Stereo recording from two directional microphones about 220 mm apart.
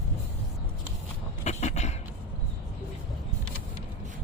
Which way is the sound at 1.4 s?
30° left (ahead or behind).